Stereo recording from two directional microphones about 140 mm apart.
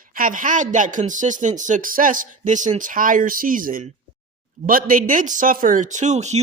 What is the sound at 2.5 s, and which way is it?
Speech, 65° right (ahead or behind).